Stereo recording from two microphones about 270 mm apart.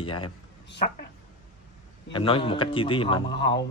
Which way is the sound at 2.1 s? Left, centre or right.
Centre.